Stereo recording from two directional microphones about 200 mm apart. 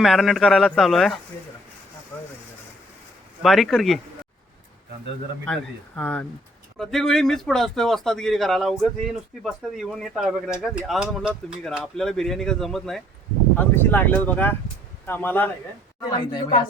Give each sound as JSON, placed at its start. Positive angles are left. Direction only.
{"t": 0.0, "sound": "a man's voice", "side_deg": 0}
{"t": 3.4, "sound": "a man's voice", "side_deg": 0}
{"t": 6.0, "sound": "a man's voice", "side_deg": 5}
{"t": 16.0, "sound": "a woman's voice", "side_deg": 25}